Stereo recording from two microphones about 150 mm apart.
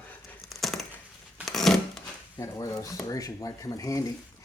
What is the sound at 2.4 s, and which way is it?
Speech, 20° left (ahead or behind).